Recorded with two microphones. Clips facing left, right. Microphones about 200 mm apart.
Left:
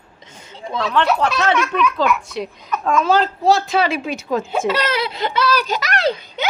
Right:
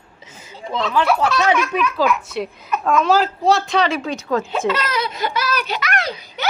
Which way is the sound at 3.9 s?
15° left (ahead or behind).